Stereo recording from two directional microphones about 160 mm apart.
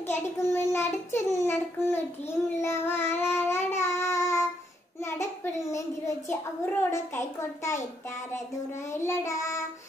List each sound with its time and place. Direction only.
0.1 s child singing: 15° left (ahead or behind)
5.0 s a child's voice: 15° left (ahead or behind)
8.9 s child singing: 15° left (ahead or behind)